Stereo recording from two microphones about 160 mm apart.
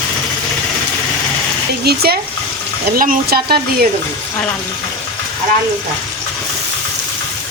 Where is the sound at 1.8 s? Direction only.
80° right.